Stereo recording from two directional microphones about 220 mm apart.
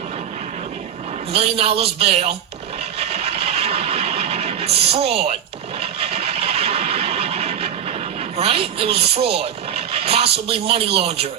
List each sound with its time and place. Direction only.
1.3 s speech: 25° right (ahead or behind)
3.0 s a sound: 30° right (ahead or behind)
8.4 s speech: 25° right (ahead or behind)